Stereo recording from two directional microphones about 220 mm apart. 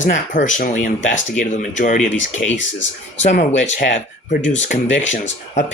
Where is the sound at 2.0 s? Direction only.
60° left (ahead or behind).